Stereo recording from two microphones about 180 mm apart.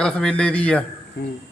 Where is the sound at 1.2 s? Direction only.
75° left (ahead or behind).